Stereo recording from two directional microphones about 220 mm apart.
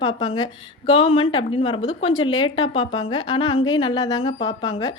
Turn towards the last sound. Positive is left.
turn(degrees=15)  # may be behind; listen again after turning